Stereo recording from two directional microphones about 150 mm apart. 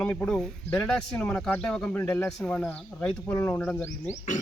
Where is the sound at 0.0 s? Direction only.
5° left (ahead or behind).